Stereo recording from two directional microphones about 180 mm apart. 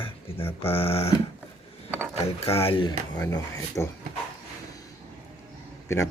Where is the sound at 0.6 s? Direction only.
30° left (ahead or behind).